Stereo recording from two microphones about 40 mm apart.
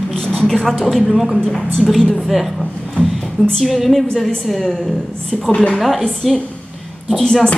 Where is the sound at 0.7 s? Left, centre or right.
Centre.